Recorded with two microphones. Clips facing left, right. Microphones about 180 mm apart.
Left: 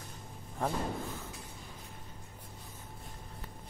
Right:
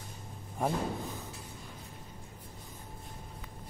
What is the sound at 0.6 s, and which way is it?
Speech, 15° right (ahead or behind).